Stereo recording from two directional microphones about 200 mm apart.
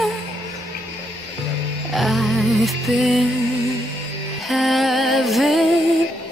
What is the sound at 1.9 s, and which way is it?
Music, centre (ahead or behind).